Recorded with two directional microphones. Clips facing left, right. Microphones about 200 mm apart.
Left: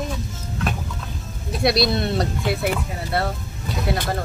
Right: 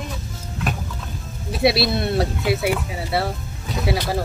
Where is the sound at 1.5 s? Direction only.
5° right (ahead or behind).